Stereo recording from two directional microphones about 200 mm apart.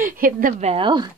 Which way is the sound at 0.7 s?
25° right (ahead or behind).